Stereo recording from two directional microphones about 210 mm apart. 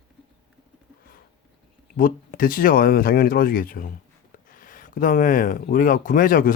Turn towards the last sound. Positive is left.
turn(degrees=40)  # may be behind; listen again after turning